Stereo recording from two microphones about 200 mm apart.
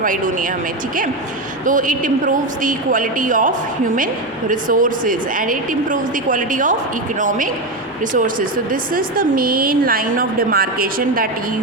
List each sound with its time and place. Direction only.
0.0 s speech: 40° right (ahead or behind)
1.6 s a woman's voice: 40° right (ahead or behind)